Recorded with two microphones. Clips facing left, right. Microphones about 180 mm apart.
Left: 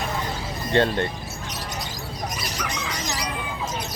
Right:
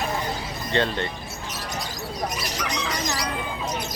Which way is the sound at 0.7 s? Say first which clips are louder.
Left 4 dB; 50° left (ahead or behind).